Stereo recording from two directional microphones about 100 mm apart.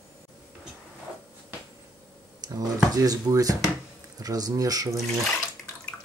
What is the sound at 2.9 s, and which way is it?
Speech, 35° right (ahead or behind).